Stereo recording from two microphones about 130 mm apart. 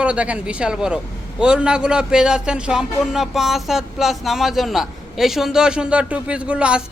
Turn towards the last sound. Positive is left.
turn(degrees=-10)  # may be behind; listen again after turning